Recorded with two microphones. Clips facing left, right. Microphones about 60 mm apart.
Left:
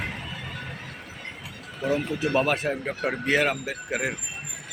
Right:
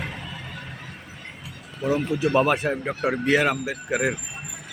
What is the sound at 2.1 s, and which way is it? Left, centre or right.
Speech, centre.